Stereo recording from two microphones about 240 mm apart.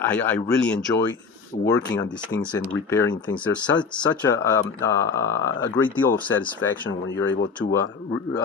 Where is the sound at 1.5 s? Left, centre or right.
Left.